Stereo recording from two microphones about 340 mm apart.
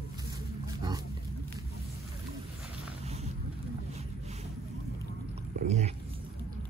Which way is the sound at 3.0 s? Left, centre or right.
Centre.